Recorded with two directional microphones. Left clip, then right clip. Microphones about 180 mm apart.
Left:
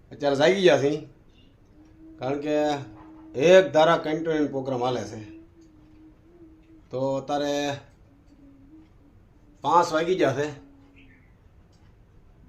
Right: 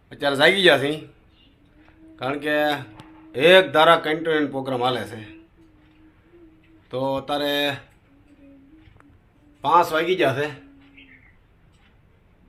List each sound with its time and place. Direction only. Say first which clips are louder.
0.1 s speech: right 3 dB; centre (ahead or behind)
2.1 s speech: right 3 dB; centre (ahead or behind)
6.9 s speech: right 2 dB; centre (ahead or behind)
9.6 s a man's voice: right 3 dB; 15° right (ahead or behind)